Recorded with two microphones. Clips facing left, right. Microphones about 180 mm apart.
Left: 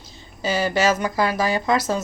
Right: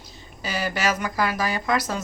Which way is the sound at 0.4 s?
25° left (ahead or behind).